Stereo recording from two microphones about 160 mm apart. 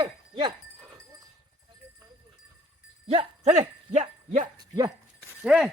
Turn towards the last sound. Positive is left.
turn(degrees=-5)  # may be behind; listen again after turning